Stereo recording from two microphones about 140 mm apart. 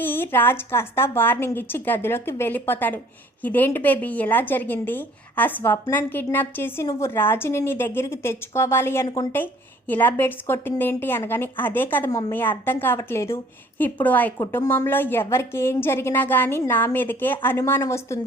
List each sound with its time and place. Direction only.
0.0 s a woman's voice: 15° left (ahead or behind)
14.3 s a woman's voice: 25° left (ahead or behind)